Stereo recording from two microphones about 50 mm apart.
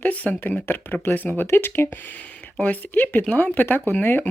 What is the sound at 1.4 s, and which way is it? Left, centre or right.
Speech, left.